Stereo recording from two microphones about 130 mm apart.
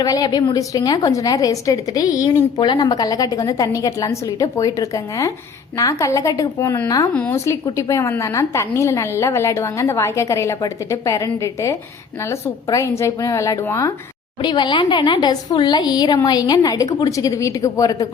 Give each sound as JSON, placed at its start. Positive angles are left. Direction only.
{"t": 0.0, "sound": "a woman's voice", "side_deg": 30}
{"t": 7.3, "sound": "a woman's voice", "side_deg": 25}
{"t": 14.4, "sound": "speech", "side_deg": 35}